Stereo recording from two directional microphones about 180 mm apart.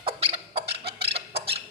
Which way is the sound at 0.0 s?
35° right (ahead or behind).